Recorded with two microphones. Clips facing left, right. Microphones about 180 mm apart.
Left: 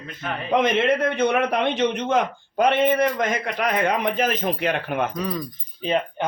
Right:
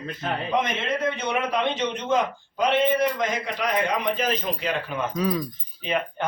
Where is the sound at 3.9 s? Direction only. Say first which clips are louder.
Left 3 dB; 55° left (ahead or behind).